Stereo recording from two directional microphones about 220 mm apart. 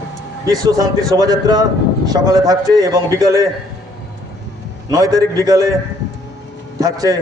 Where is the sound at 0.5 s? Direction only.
15° right (ahead or behind).